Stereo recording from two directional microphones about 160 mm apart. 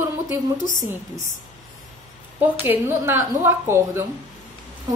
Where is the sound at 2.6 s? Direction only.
15° right (ahead or behind).